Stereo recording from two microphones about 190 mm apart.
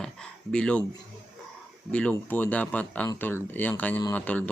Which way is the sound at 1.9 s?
5° left (ahead or behind).